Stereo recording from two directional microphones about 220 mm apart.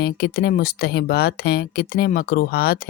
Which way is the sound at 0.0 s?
45° left (ahead or behind).